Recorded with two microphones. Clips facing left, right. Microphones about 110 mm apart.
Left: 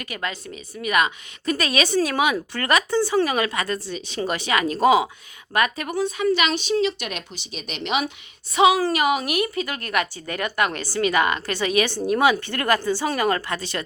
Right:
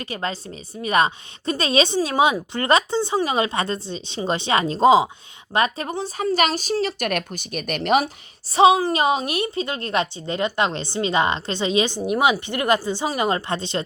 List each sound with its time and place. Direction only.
0.0 s speech: 30° right (ahead or behind)